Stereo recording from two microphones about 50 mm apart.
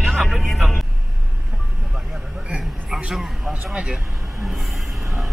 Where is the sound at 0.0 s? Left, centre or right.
Centre.